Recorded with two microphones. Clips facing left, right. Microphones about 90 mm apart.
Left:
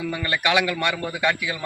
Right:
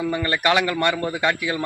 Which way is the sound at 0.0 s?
30° right (ahead or behind).